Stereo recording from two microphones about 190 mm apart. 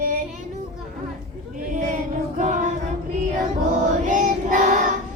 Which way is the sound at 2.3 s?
40° right (ahead or behind).